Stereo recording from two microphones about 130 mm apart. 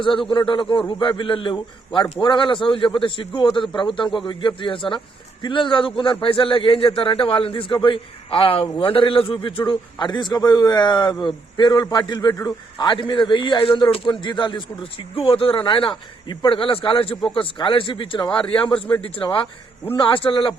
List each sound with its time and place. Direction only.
0.3 s a man's voice: 40° left (ahead or behind)
18.5 s a man's voice: 10° left (ahead or behind)
19.0 s a man's voice: 45° left (ahead or behind)